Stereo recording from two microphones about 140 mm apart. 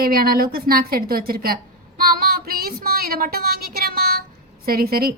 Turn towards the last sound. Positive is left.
turn(degrees=-90)